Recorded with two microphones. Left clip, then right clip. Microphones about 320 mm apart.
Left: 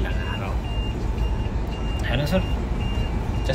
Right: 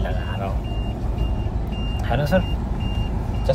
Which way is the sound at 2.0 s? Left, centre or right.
Right.